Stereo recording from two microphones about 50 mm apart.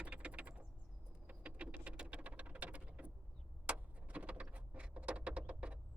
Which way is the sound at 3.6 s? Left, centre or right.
Right.